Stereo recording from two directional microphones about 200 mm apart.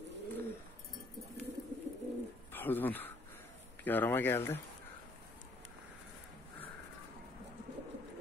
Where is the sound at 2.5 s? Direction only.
10° left (ahead or behind).